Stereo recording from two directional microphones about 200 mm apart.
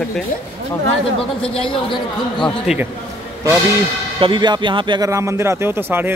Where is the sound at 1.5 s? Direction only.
25° left (ahead or behind).